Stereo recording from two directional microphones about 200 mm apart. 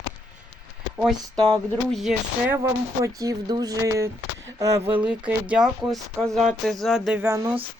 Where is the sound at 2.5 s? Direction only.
15° right (ahead or behind).